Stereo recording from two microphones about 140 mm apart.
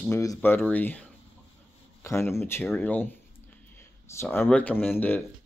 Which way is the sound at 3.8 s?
20° left (ahead or behind).